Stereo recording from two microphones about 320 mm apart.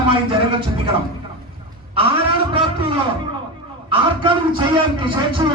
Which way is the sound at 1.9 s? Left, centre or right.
Centre.